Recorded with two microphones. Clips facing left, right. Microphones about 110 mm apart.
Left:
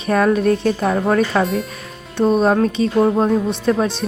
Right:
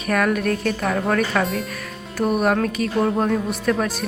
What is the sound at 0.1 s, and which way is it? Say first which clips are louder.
A woman's voice: left 5 dB; 30° left (ahead or behind).